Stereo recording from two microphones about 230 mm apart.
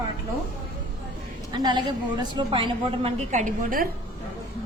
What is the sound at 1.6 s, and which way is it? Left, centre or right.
A woman's voice, centre.